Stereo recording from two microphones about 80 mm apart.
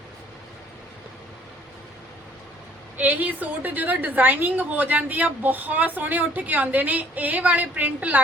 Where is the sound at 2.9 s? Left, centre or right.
Centre.